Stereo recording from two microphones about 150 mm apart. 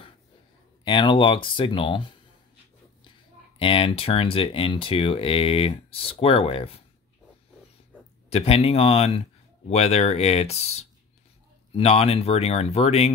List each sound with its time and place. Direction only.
0.8 s speech: 35° left (ahead or behind)
3.5 s speech: 35° left (ahead or behind)
8.3 s speech: 45° left (ahead or behind)